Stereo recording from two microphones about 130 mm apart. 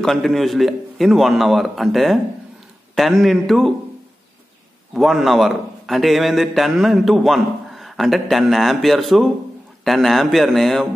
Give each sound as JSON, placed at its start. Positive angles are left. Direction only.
{"t": 0.0, "sound": "a man's voice", "side_deg": 0}
{"t": 4.9, "sound": "a man's voice", "side_deg": 0}